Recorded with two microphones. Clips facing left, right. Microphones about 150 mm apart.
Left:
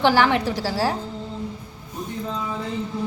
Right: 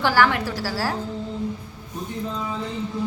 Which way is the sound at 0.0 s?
20° left (ahead or behind).